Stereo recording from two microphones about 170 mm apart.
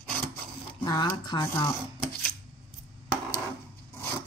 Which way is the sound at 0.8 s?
25° left (ahead or behind).